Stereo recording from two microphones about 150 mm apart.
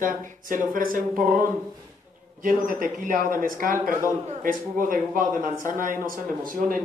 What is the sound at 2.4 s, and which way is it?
A man's voice, 65° right (ahead or behind).